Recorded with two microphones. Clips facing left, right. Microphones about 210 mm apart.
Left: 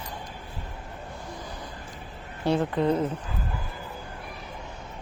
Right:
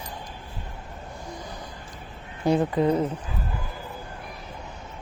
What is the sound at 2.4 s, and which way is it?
Speech, 10° right (ahead or behind).